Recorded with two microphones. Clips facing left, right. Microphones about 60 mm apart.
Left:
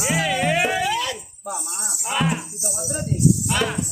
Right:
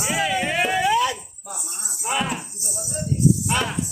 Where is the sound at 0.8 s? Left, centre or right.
Right.